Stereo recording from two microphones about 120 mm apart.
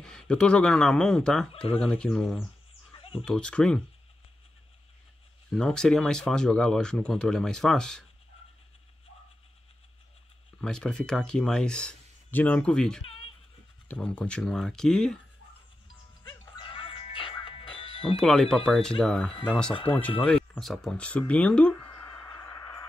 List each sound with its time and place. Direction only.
0.0 s speech: 5° left (ahead or behind)
3.0 s a sound: 50° left (ahead or behind)
3.3 s speech: 5° left (ahead or behind)
5.5 s speech: 5° left (ahead or behind)
10.6 s speech: 5° left (ahead or behind)
16.3 s music: 45° left (ahead or behind)
18.1 s speech: 5° left (ahead or behind)
22.3 s a sound: 25° left (ahead or behind)